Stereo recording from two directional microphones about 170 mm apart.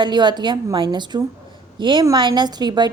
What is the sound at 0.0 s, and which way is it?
A woman's voice, 25° right (ahead or behind).